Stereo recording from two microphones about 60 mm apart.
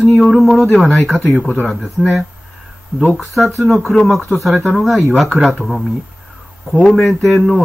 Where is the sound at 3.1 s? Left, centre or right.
Centre.